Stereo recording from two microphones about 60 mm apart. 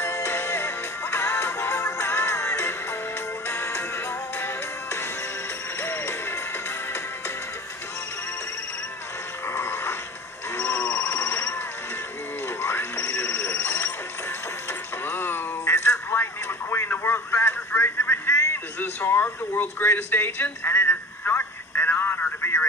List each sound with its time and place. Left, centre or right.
0.0 s music: left
5.8 s music: left
9.5 s dog: left
10.9 s a sound: left
12.6 s music: left
14.7 s a sound: left